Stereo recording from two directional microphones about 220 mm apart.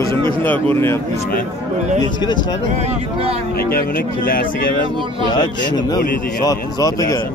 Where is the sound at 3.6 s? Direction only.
40° left (ahead or behind).